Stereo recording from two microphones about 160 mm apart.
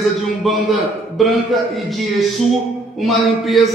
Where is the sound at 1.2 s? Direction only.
Centre (ahead or behind).